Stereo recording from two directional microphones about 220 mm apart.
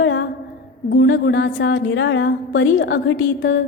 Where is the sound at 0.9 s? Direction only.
50° left (ahead or behind).